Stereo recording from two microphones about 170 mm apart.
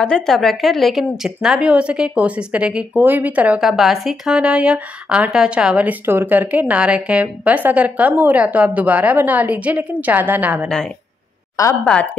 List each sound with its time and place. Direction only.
0.0 s a woman's voice: 5° left (ahead or behind)
11.8 s speech: 5° left (ahead or behind)